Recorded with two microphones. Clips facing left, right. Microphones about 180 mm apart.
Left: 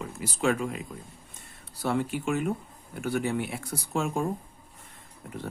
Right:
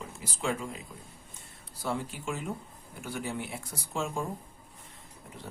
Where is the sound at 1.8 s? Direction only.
65° left (ahead or behind).